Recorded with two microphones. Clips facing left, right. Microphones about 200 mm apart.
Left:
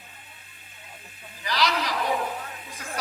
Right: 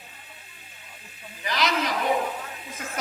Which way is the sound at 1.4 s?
20° right (ahead or behind).